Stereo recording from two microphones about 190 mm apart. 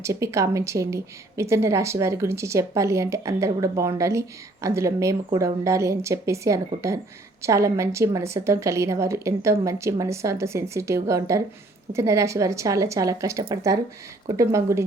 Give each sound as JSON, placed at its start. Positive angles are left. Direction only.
{"t": 0.0, "sound": "a woman's voice", "side_deg": -15}